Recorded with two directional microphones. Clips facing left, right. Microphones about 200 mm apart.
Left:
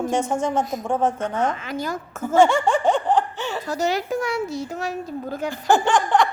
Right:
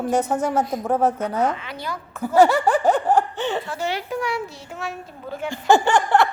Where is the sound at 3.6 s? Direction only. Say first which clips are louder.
Left 3 dB; 40° left (ahead or behind).